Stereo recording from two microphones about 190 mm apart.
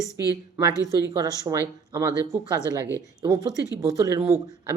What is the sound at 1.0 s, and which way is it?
Speech, 15° right (ahead or behind).